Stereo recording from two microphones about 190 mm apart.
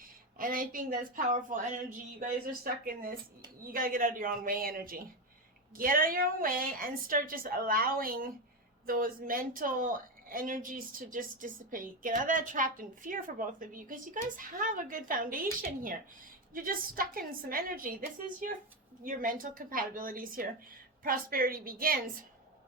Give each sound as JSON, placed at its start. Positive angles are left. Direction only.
{"t": 0.0, "sound": "a woman's voice", "side_deg": -50}
{"t": 16.6, "sound": "a woman's voice", "side_deg": -50}
{"t": 19.0, "sound": "a woman's voice", "side_deg": -45}